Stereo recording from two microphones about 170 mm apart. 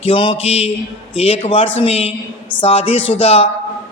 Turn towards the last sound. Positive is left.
turn(degrees=35)  # may be behind; listen again after turning